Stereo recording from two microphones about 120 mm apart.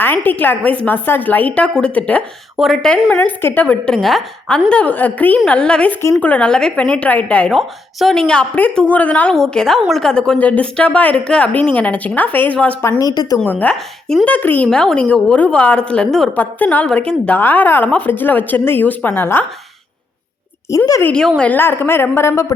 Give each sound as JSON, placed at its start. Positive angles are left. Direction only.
{"t": 0.0, "sound": "a woman's voice", "side_deg": 15}
{"t": 2.6, "sound": "a woman's voice", "side_deg": 0}
{"t": 7.5, "sound": "a woman's voice", "side_deg": 0}
{"t": 13.0, "sound": "speech", "side_deg": 30}
{"t": 13.4, "sound": "a woman's voice", "side_deg": 10}
{"t": 14.3, "sound": "a woman's voice", "side_deg": 15}
{"t": 20.7, "sound": "a woman's voice", "side_deg": 30}
{"t": 21.0, "sound": "a woman's voice", "side_deg": 5}